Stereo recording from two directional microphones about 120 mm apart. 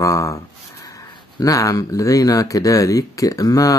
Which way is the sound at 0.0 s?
30° left (ahead or behind).